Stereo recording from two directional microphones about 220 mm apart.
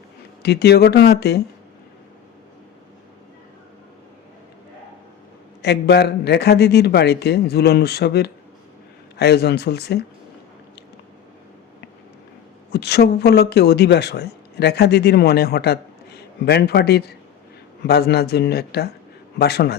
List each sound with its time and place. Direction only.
0.4 s speech: 50° left (ahead or behind)
5.6 s speech: 50° left (ahead or behind)
12.7 s speech: 50° left (ahead or behind)